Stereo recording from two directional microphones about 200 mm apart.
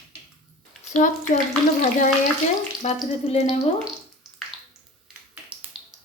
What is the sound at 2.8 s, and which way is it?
Speech, 35° left (ahead or behind).